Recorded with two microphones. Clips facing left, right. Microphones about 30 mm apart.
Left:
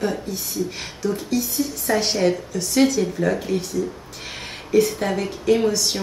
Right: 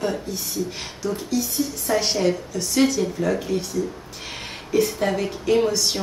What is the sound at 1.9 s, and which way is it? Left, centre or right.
A woman's voice, centre.